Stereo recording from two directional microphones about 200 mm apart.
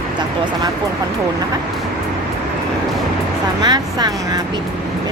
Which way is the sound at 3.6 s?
20° right (ahead or behind).